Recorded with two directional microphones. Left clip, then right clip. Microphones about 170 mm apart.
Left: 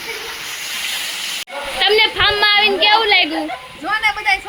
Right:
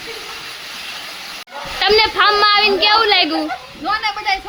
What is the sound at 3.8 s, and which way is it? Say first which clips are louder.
Speech: left 2 dB; centre (ahead or behind).